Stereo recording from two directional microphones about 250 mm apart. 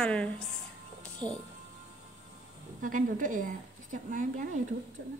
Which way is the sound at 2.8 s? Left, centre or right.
Right.